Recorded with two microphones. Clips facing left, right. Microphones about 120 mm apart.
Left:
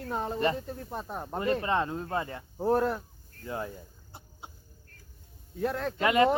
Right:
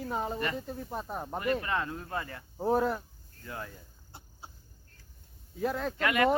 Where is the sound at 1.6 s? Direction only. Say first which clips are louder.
Left 5 dB; 25° left (ahead or behind).